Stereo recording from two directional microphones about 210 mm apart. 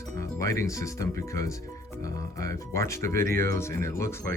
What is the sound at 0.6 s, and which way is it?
Speech, 15° left (ahead or behind).